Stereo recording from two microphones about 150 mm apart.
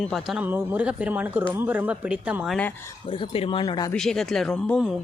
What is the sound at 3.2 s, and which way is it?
Speech, 40° left (ahead or behind).